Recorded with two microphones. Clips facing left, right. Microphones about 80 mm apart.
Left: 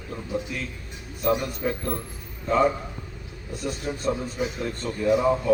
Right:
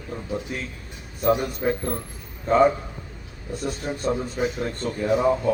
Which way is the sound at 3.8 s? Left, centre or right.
Right.